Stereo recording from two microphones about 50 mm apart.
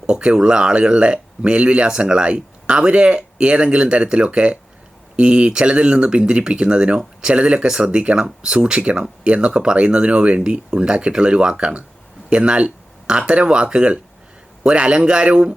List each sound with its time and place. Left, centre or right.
0.0 s speech: centre